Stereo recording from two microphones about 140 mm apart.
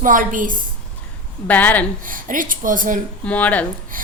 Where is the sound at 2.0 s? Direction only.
75° right (ahead or behind).